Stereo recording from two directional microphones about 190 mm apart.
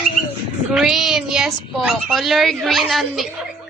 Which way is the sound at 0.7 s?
Centre (ahead or behind).